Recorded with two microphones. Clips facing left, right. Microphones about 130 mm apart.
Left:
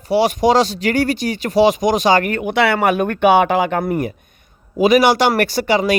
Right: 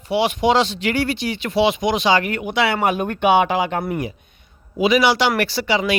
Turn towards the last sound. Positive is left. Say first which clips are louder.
# left 4 dB
turn(degrees=45)  # may be behind; listen again after turning